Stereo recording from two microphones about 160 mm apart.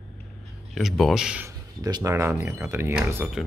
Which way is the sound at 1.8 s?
25° right (ahead or behind).